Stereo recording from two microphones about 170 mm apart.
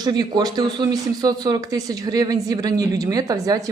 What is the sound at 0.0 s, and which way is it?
Speech, 25° right (ahead or behind).